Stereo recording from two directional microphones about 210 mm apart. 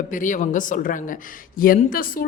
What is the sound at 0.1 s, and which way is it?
Speech, 40° left (ahead or behind).